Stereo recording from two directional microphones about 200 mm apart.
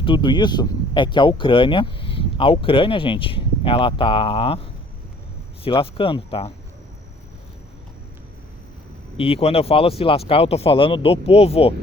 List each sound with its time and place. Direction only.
0.0 s speech: 25° left (ahead or behind)
5.6 s speech: 25° left (ahead or behind)
9.1 s speech: 30° left (ahead or behind)